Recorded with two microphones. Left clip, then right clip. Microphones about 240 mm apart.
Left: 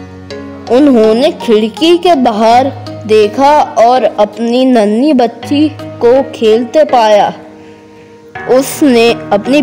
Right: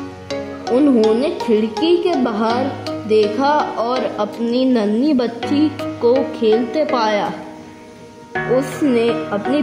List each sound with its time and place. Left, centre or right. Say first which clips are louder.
0.7 s speech: left 8 dB; left
8.8 s speech: left 9 dB; left